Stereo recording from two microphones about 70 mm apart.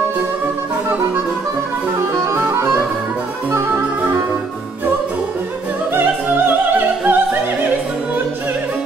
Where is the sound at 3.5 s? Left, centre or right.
Right.